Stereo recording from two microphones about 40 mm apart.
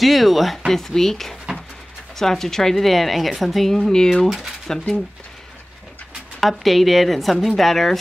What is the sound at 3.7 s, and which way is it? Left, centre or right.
Speech, centre.